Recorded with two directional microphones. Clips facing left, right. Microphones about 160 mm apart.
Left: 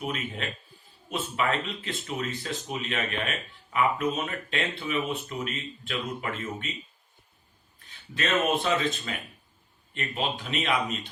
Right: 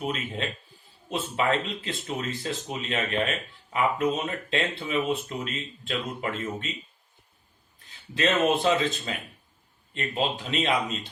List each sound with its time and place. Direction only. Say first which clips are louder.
0.1 s speech: right 2 dB; 30° right (ahead or behind)
8.1 s speech: right 3 dB; 30° right (ahead or behind)